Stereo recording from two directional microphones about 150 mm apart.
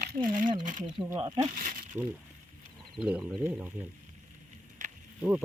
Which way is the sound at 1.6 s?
60° right (ahead or behind).